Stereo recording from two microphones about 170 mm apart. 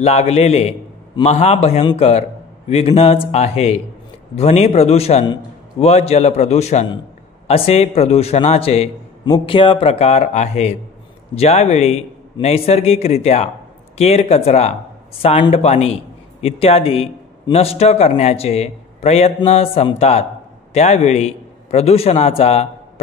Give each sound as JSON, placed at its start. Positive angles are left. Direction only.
{"t": 0.0, "sound": "a man's voice", "side_deg": 40}